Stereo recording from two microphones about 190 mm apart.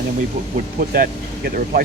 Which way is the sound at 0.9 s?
50° right (ahead or behind).